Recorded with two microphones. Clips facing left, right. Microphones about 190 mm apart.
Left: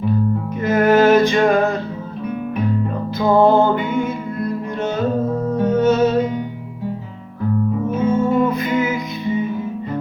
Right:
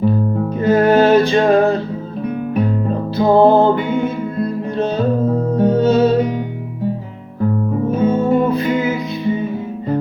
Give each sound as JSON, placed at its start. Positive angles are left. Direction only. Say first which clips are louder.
{"t": 0.6, "sound": "music", "louder": "right 2 dB", "side_deg": -30}
{"t": 3.2, "sound": "music", "louder": "right 3 dB", "side_deg": -30}
{"t": 8.0, "sound": "music", "louder": "right 1 dB", "side_deg": -30}